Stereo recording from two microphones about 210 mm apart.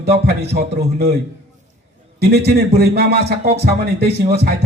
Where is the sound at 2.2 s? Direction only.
50° right (ahead or behind).